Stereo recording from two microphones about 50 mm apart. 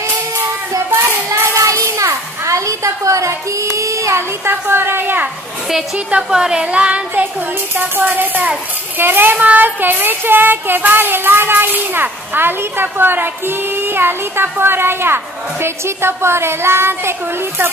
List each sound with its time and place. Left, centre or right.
0.8 s child singing: right
1.6 s a sound: right
4.5 s child singing: right
6.3 s speech: centre
7.7 s speech: right
9.0 s child singing: right
15.6 s a woman's voice: right